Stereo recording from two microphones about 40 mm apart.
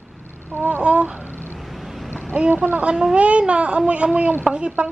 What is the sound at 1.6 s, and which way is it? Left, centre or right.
Vehicle, centre.